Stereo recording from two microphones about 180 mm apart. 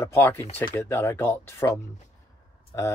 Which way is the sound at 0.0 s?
15° left (ahead or behind).